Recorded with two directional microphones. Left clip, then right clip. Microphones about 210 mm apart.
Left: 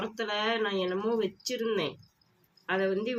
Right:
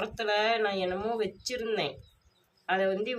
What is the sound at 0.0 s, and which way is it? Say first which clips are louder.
Speech: right 3 dB; 15° right (ahead or behind).